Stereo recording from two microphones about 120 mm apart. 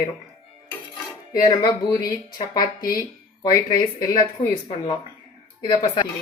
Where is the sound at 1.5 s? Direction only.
35° left (ahead or behind).